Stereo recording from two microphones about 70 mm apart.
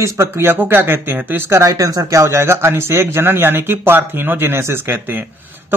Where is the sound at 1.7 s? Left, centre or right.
Right.